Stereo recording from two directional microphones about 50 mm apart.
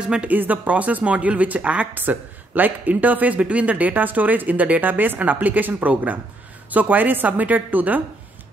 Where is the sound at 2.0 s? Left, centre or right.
Right.